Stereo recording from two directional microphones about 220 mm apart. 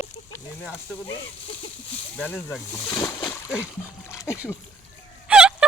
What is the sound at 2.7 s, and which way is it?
Splash, 20° left (ahead or behind).